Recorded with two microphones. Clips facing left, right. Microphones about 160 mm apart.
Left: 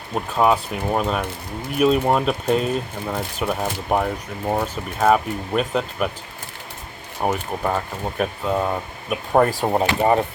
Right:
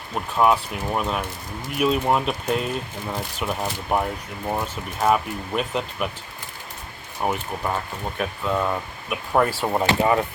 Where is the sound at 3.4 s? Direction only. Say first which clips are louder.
Left 3 dB; 40° left (ahead or behind).